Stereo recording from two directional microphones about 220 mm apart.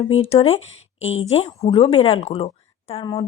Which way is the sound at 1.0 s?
65° left (ahead or behind).